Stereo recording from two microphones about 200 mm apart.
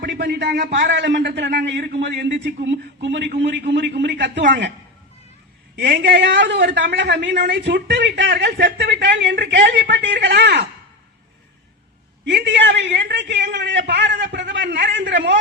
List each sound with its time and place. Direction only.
0.0 s a man's voice: 60° right (ahead or behind)
5.7 s a man's voice: 60° right (ahead or behind)
12.3 s a man's voice: 60° right (ahead or behind)